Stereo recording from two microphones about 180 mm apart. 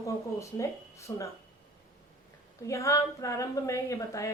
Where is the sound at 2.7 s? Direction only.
15° left (ahead or behind).